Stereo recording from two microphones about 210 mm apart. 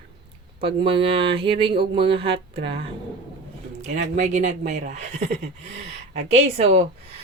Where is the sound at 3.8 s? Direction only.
35° right (ahead or behind).